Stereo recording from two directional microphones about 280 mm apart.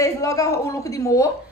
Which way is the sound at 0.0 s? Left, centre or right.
Centre.